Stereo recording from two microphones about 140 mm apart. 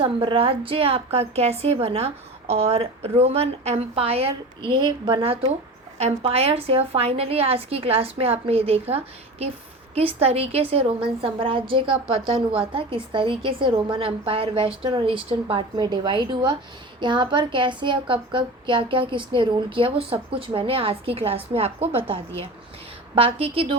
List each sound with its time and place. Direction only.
0.0 s a woman's voice: 40° right (ahead or behind)
10.2 s a woman's voice: 45° right (ahead or behind)